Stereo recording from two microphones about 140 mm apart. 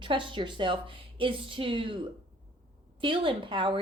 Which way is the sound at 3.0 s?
40° right (ahead or behind).